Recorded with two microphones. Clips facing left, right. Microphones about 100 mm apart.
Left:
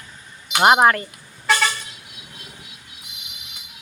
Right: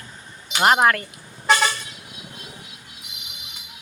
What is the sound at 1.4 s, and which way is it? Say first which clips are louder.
Vehicle: right 1 dB; 20° right (ahead or behind).